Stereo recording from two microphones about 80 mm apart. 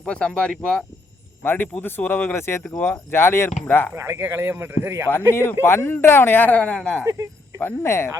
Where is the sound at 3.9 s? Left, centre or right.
Right.